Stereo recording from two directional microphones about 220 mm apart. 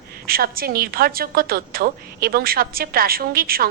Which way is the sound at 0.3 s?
40° right (ahead or behind).